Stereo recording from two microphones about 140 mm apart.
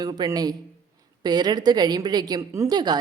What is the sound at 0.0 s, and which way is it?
A woman's voice, 30° right (ahead or behind).